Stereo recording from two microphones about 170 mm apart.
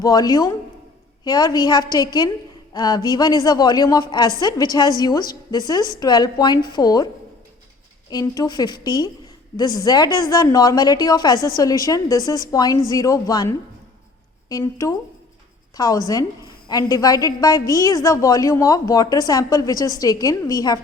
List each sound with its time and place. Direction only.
0.0 s a woman's voice: 20° left (ahead or behind)
8.1 s a woman's voice: 20° left (ahead or behind)
14.5 s a woman's voice: 20° left (ahead or behind)